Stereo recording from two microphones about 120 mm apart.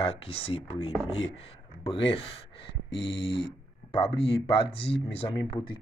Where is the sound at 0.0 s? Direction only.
55° left (ahead or behind).